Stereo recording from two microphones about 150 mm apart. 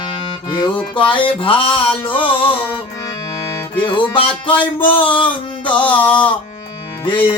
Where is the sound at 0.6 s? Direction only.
35° left (ahead or behind).